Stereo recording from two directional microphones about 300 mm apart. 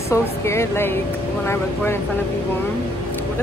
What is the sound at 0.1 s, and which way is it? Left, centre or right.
Speech, centre.